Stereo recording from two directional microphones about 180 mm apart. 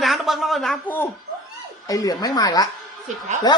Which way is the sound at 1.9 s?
20° left (ahead or behind).